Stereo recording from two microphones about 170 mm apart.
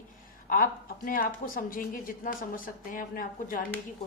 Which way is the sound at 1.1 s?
55° left (ahead or behind).